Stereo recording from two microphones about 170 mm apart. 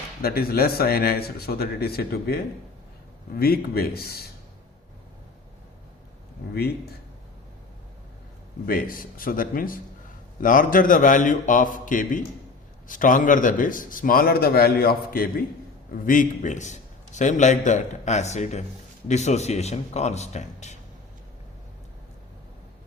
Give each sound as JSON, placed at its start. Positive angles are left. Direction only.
{"t": 0.2, "sound": "a man's voice", "side_deg": 60}
{"t": 6.5, "sound": "a man's voice", "side_deg": 65}
{"t": 8.6, "sound": "a man's voice", "side_deg": 55}
{"t": 16.0, "sound": "a man's voice", "side_deg": 50}